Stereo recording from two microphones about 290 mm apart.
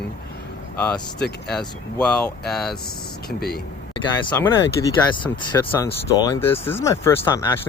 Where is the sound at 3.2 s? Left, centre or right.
Left.